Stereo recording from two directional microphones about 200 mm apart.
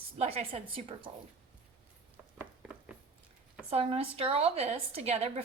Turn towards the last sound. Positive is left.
turn(degrees=-30)  # may be behind; listen again after turning